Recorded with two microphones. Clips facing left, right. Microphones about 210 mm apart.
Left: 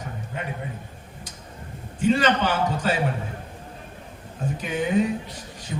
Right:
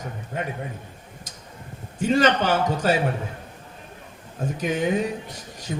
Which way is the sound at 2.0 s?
40° right (ahead or behind).